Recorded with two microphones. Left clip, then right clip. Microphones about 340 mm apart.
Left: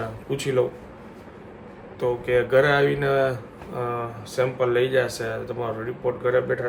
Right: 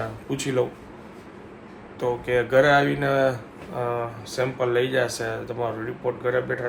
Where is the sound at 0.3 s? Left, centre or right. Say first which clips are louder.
Left 2 dB; centre.